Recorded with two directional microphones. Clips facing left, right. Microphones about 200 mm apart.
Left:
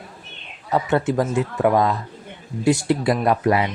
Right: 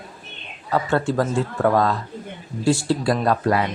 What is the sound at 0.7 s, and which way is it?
Speech, 20° left (ahead or behind).